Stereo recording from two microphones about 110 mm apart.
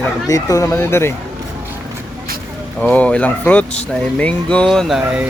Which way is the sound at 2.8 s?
15° left (ahead or behind).